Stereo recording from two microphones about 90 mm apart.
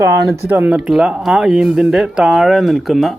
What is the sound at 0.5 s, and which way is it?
Speech, 20° right (ahead or behind).